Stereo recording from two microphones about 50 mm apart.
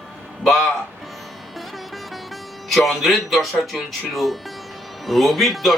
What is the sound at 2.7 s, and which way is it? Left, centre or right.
Speech, centre.